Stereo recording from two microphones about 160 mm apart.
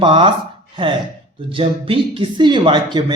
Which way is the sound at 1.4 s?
35° right (ahead or behind).